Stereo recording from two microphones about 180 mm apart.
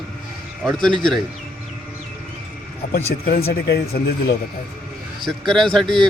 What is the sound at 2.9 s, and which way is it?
Speech, 55° left (ahead or behind).